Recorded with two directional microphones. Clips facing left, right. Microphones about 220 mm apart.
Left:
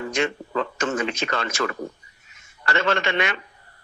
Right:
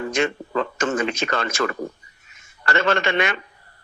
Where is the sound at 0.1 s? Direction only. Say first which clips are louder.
Right 1 dB; 50° right (ahead or behind).